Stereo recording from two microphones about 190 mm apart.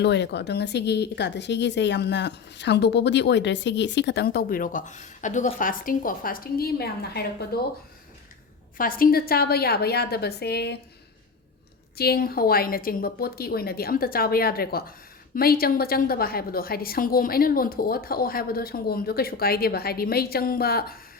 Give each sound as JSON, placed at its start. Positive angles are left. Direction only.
{"t": 0.0, "sound": "a woman's voice", "side_deg": 65}
{"t": 8.8, "sound": "a woman's voice", "side_deg": 50}
{"t": 11.9, "sound": "a woman's voice", "side_deg": 55}